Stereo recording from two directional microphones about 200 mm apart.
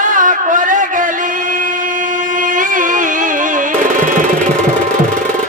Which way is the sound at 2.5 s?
40° right (ahead or behind).